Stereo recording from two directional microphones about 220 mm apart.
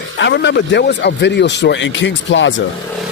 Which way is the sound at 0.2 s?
55° left (ahead or behind).